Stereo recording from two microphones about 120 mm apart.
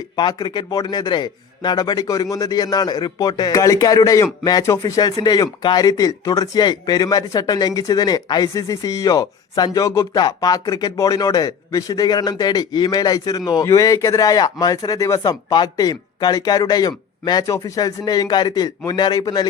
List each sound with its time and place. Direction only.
0.2 s speech: 40° left (ahead or behind)
10.2 s speech: 35° left (ahead or behind)